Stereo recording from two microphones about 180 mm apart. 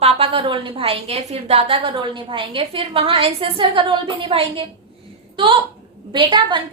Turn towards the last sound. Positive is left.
turn(degrees=-25)  # may be behind; listen again after turning